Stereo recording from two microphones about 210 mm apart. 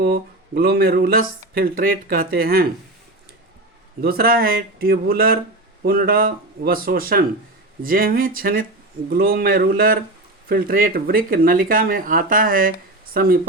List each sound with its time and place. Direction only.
0.0 s speech: 50° right (ahead or behind)
4.0 s speech: 45° right (ahead or behind)